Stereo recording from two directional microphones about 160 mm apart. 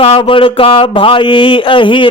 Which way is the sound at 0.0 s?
35° left (ahead or behind).